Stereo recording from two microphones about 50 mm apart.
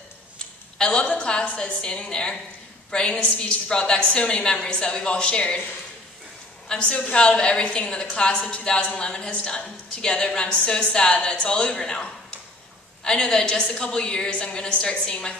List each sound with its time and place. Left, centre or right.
0.7 s a woman's voice: centre
6.7 s a woman's voice: left